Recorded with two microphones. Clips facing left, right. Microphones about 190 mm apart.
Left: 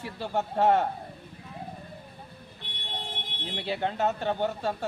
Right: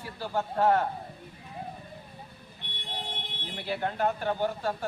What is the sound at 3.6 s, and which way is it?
Speech, 25° left (ahead or behind).